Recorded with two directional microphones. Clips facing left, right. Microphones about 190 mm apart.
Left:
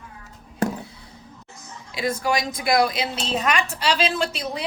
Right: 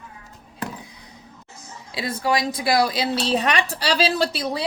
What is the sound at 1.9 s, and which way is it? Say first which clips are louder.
A woman's voice: even; 30° right (ahead or behind).